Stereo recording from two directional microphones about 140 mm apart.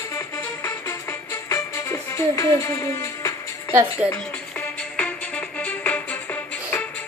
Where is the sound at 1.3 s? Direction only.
20° left (ahead or behind).